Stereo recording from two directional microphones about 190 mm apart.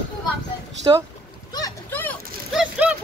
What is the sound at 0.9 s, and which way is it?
Speech, 25° right (ahead or behind).